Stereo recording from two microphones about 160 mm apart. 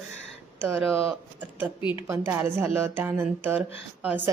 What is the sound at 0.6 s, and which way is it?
Speech, 10° right (ahead or behind).